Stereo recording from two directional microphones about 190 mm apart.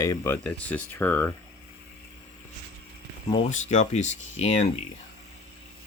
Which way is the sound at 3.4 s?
40° left (ahead or behind).